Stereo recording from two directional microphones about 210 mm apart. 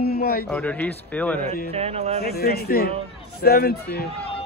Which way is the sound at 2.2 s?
50° left (ahead or behind).